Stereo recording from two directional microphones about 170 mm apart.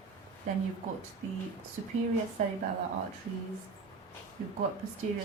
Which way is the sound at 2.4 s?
40° right (ahead or behind).